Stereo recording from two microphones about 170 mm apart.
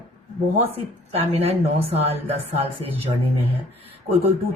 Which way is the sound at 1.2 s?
35° right (ahead or behind).